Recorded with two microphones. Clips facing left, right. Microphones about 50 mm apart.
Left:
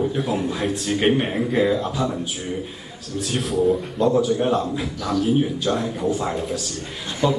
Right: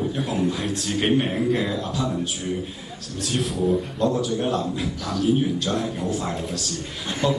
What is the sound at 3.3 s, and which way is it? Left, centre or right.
A man's voice, centre.